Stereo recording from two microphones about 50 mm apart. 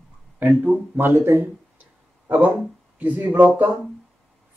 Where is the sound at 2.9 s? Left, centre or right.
Right.